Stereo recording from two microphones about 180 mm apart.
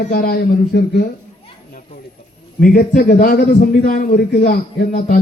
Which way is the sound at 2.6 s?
55° left (ahead or behind).